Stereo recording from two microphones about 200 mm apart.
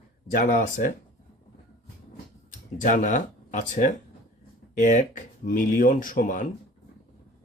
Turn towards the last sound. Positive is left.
turn(degrees=40)  # may be behind; listen again after turning